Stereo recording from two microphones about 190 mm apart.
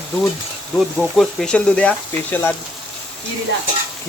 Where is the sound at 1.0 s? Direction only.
5° left (ahead or behind).